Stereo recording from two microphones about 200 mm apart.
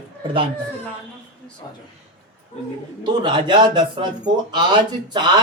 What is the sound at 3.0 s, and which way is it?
Speech, 25° right (ahead or behind).